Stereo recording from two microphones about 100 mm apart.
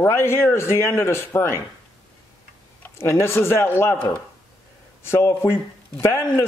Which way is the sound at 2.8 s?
25° left (ahead or behind).